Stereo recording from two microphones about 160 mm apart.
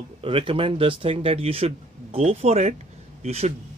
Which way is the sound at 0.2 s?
35° right (ahead or behind).